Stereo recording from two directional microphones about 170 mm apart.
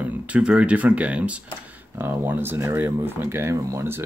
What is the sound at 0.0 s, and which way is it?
Speech, 5° right (ahead or behind).